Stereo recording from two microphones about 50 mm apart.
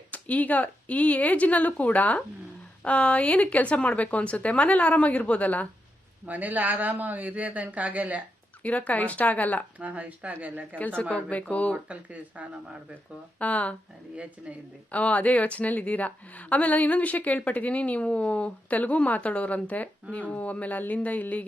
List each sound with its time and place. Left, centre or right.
0.1 s a woman's voice: left
6.2 s a man's voice: right
8.6 s speech: left
9.7 s a man's voice: right
10.8 s a woman's voice: left
12.4 s speech: right
13.4 s a woman's voice: left
14.9 s a woman's voice: left